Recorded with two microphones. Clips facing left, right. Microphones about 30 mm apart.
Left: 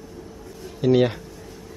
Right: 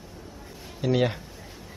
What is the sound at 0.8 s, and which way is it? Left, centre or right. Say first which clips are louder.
Speech: left 6 dB; centre.